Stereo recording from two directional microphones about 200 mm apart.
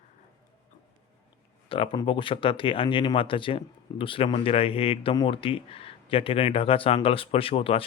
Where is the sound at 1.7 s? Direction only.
25° left (ahead or behind).